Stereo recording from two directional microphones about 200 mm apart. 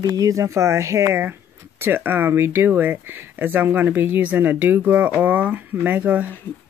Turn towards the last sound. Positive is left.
turn(degrees=-5)  # may be behind; listen again after turning